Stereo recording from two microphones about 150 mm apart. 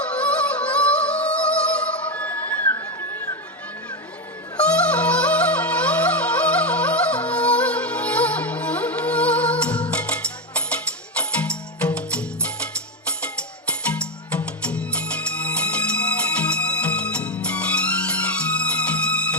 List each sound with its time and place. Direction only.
0.0 s music: 10° left (ahead or behind)
4.5 s music: 10° left (ahead or behind)
13.8 s music: 10° left (ahead or behind)